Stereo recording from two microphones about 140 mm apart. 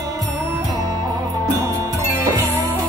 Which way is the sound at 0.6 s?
25° right (ahead or behind).